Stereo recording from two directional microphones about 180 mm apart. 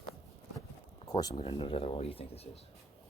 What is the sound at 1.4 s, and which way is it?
Speech, 30° left (ahead or behind).